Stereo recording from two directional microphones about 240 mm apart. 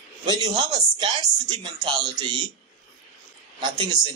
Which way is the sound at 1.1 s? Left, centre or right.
Centre.